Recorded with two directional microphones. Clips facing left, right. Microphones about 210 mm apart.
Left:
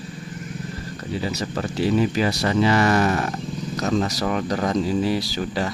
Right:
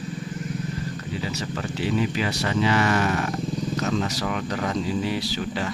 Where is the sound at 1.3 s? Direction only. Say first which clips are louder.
Left 3 dB; 40° left (ahead or behind).